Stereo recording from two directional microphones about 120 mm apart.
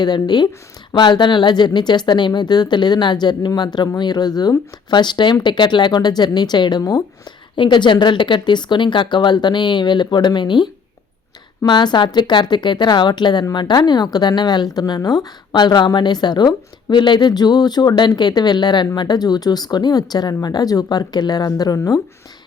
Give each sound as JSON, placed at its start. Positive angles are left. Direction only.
{"t": 0.0, "sound": "speech", "side_deg": 35}